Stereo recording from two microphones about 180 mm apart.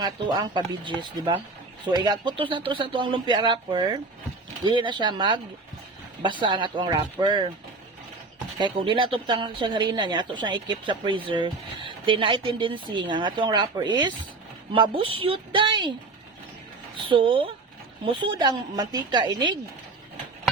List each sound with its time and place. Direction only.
0.0 s speech: 25° right (ahead or behind)
6.4 s speech: 25° right (ahead or behind)
8.5 s a woman's voice: 25° right (ahead or behind)
17.1 s speech: 30° right (ahead or behind)